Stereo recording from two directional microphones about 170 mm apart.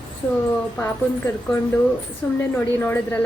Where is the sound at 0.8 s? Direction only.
15° left (ahead or behind).